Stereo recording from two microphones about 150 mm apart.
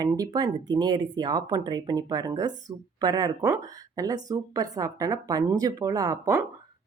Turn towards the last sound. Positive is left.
turn(degrees=-20)  # may be behind; listen again after turning